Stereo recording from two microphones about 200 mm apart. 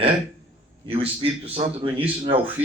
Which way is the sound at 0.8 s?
25° right (ahead or behind).